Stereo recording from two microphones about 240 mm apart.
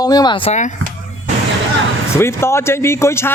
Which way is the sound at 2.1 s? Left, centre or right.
Centre.